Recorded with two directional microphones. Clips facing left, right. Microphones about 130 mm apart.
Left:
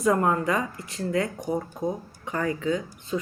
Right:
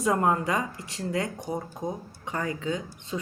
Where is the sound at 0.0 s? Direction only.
25° right (ahead or behind).